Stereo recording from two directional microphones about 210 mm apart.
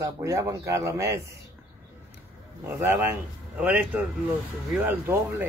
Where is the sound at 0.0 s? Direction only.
15° right (ahead or behind).